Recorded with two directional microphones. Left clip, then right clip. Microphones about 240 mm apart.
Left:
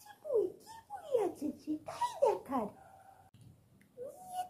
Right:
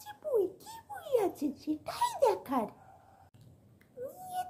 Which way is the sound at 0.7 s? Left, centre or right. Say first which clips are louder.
Right 3 dB; right.